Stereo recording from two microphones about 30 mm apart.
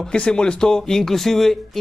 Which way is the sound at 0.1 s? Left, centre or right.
Left.